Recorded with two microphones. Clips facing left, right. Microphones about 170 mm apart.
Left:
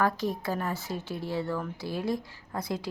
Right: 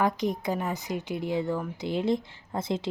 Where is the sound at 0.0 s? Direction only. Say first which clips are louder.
Right 2 dB; 20° right (ahead or behind).